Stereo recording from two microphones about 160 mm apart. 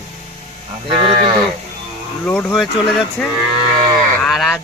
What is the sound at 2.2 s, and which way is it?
Speech, 10° left (ahead or behind).